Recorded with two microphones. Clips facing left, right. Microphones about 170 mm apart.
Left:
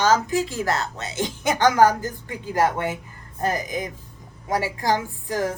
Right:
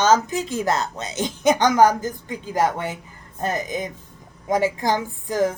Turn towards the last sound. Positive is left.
turn(degrees=-20)  # may be behind; listen again after turning